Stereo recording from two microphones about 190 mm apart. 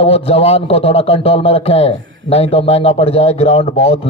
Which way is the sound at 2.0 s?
80° right.